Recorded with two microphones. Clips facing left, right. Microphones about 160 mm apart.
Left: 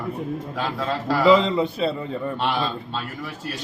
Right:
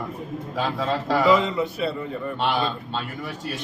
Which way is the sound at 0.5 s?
Centre (ahead or behind).